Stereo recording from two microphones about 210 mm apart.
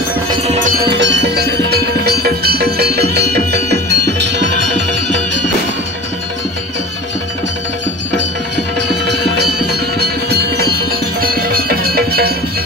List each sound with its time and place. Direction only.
0.5 s music: 40° right (ahead or behind); by 4.6 s 55° right (ahead or behind)
8.7 s music: 55° right (ahead or behind)